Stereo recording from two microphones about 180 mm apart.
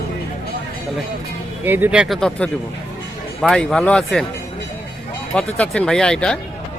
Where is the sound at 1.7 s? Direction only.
10° right (ahead or behind); by 4.2 s 5° left (ahead or behind).